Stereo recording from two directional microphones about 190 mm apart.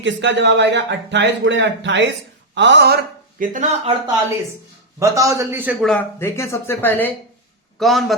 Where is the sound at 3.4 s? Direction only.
45° right (ahead or behind).